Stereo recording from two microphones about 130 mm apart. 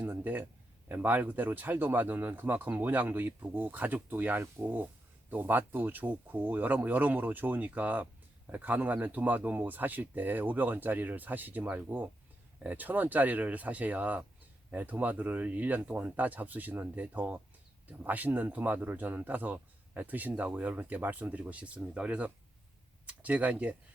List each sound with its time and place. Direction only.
0.9 s speech: 15° right (ahead or behind)